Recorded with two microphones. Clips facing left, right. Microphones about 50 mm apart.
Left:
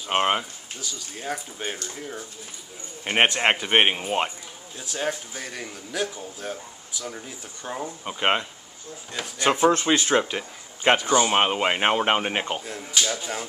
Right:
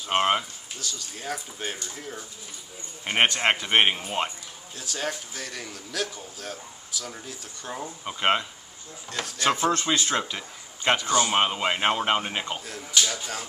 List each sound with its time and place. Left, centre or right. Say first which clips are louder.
0.1 s speech: even; centre
3.1 s speech: left 2 dB; centre